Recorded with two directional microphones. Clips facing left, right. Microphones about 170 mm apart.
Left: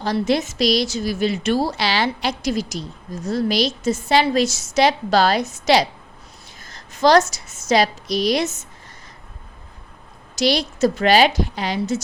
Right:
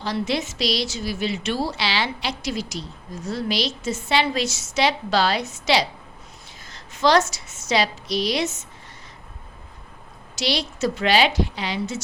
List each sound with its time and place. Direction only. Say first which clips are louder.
0.0 s a woman's voice: left 5 dB; 45° left (ahead or behind)
10.3 s a woman's voice: left 6 dB; 45° left (ahead or behind)